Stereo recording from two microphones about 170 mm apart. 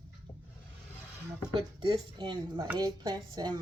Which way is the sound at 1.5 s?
25° right (ahead or behind).